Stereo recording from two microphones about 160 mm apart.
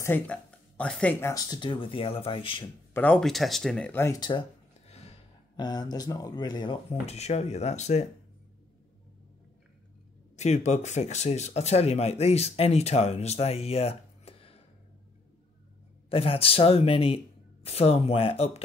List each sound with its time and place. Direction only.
0.0 s speech: 10° left (ahead or behind)
1.2 s speech: 25° left (ahead or behind)
2.9 s speech: 10° left (ahead or behind)
4.8 s gasp: 40° left (ahead or behind)
5.6 s speech: 25° left (ahead or behind); by 8.1 s 45° left (ahead or behind)
10.3 s speech: 45° left (ahead or behind)
16.1 s speech: 35° left (ahead or behind)